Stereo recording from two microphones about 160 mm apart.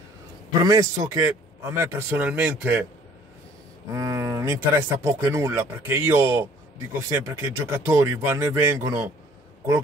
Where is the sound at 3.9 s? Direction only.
20° right (ahead or behind).